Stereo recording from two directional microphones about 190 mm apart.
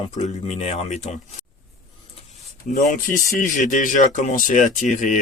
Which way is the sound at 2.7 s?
45° left (ahead or behind).